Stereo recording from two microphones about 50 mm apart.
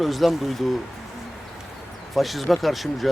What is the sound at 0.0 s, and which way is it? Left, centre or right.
Speech, centre.